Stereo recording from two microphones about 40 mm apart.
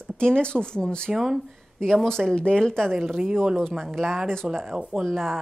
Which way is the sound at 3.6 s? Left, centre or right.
Centre.